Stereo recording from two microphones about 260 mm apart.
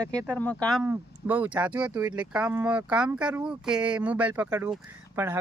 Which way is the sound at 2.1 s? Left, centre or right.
Centre.